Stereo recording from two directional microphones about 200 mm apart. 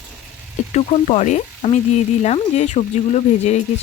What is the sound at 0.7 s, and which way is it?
Speech, 30° left (ahead or behind).